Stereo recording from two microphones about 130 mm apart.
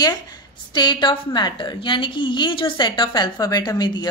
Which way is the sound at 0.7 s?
35° left (ahead or behind).